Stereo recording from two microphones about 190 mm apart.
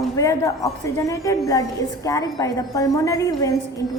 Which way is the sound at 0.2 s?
15° left (ahead or behind).